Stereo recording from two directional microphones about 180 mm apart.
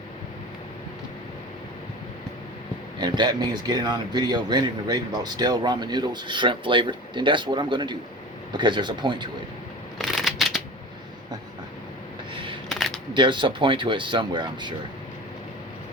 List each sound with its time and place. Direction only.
3.0 s speech: 25° right (ahead or behind)
10.0 s shuffling cards: centre (ahead or behind)
12.3 s a sound: 30° right (ahead or behind)
12.6 s camera: centre (ahead or behind)
13.1 s speech: 25° right (ahead or behind)